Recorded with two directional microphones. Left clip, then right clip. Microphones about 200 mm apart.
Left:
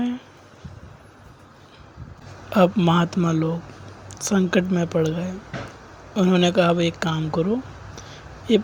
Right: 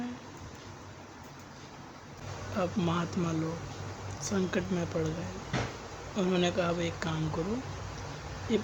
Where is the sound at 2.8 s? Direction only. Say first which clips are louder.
Left 11 dB; 40° left (ahead or behind).